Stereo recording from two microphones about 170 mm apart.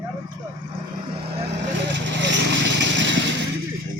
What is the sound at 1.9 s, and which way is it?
Vehicle, 90° right.